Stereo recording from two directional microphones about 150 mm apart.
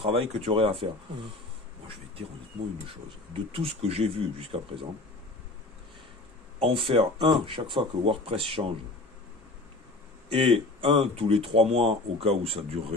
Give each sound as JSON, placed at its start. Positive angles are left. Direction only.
{"t": 0.0, "sound": "speech", "side_deg": -40}
{"t": 3.5, "sound": "speech", "side_deg": -40}
{"t": 6.6, "sound": "speech", "side_deg": -40}
{"t": 10.3, "sound": "speech", "side_deg": -40}